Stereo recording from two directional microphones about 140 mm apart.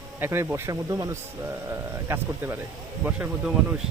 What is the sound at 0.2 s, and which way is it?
Speech, 15° right (ahead or behind).